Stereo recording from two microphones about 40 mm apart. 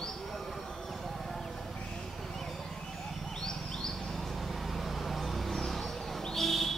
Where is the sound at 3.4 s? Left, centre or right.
Centre.